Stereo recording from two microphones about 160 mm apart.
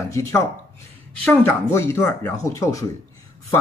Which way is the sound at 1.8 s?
15° left (ahead or behind).